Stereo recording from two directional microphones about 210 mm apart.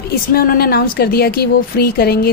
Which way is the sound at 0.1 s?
45° left (ahead or behind).